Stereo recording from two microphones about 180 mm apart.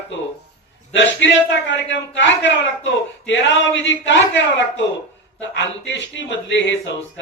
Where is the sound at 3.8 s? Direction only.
90° left.